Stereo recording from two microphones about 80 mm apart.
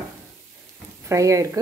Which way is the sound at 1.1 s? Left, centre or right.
Right.